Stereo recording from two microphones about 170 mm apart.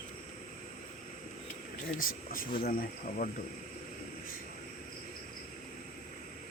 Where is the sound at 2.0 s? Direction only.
55° left (ahead or behind).